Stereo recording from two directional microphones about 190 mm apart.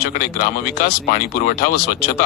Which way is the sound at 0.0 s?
50° left (ahead or behind).